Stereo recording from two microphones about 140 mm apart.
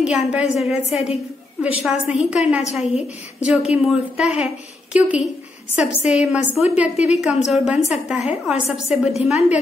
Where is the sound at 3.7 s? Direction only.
5° right (ahead or behind).